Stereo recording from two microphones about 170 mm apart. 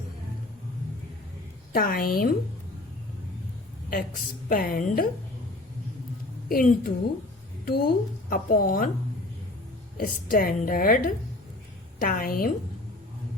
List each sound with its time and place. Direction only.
1.7 s speech: 60° left (ahead or behind)
4.4 s speech: 60° left (ahead or behind)
6.5 s speech: 60° left (ahead or behind)
10.0 s speech: 60° left (ahead or behind)